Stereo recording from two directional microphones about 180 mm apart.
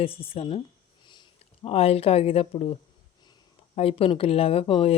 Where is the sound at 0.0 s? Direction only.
30° left (ahead or behind).